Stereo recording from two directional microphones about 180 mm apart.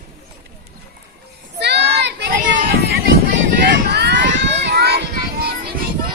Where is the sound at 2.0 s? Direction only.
75° right (ahead or behind).